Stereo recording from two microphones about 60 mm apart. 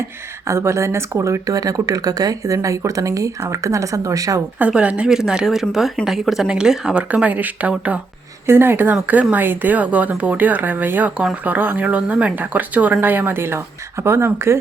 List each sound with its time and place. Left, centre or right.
0.4 s speech: right
4.7 s speech: right
5.0 s speech: centre
7.1 s speech: right
8.4 s speech: right